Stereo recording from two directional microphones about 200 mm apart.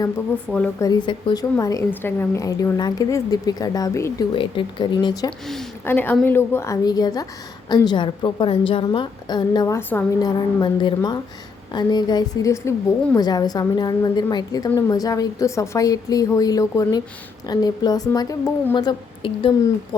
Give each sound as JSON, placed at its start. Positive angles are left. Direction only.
{"t": 0.5, "sound": "speech", "side_deg": 5}
{"t": 0.9, "sound": "a woman's voice", "side_deg": 20}
{"t": 5.5, "sound": "a woman's voice", "side_deg": 5}